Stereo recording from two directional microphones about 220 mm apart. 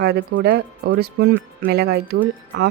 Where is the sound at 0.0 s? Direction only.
50° right (ahead or behind).